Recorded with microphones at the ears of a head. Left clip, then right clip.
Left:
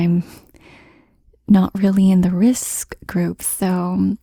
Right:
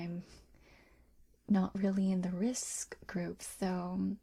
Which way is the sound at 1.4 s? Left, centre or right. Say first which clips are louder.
Left 17 dB; left.